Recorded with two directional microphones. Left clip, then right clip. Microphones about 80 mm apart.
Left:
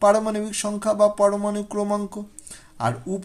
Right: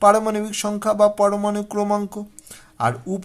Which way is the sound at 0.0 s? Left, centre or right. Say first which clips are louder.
Right 3 dB; right.